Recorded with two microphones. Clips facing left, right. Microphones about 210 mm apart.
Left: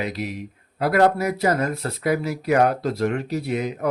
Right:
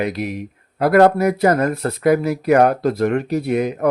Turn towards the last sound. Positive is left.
turn(degrees=-55)  # may be behind; listen again after turning